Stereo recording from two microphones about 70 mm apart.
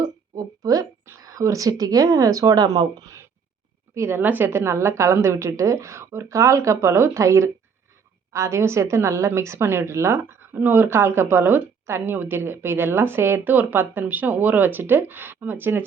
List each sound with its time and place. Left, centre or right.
0.3 s a sound: right
1.2 s speech: right
3.9 s speech: right
4.2 s a woman's voice: right
12.1 s speech: right